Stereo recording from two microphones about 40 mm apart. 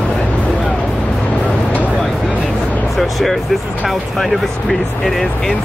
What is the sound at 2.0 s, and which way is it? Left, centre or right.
Vehicle, centre.